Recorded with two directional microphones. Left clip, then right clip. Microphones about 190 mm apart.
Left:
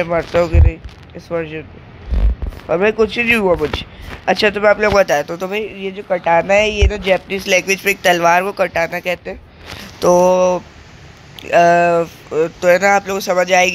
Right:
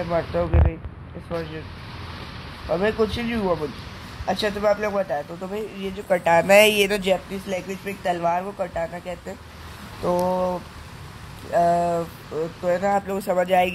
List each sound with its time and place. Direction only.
0.1 s speech: 25° left (ahead or behind)
2.7 s speech: 20° left (ahead or behind); by 5.5 s 40° left (ahead or behind)
5.8 s speech: 10° left (ahead or behind)
6.0 s speech: 5° right (ahead or behind)
7.2 s speech: 30° left (ahead or behind)
10.2 s speech: 35° left (ahead or behind)
12.9 s speech: 10° left (ahead or behind)